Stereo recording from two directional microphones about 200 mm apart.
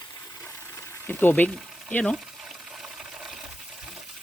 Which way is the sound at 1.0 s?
10° left (ahead or behind).